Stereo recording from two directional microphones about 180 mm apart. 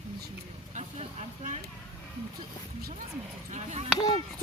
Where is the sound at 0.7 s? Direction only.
40° right (ahead or behind).